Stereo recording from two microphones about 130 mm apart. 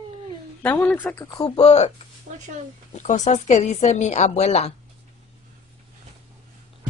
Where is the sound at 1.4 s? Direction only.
45° left (ahead or behind).